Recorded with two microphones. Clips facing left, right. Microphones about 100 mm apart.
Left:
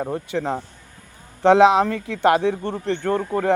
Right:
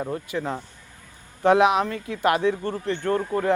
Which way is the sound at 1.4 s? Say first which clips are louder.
Left 4 dB; 30° left (ahead or behind).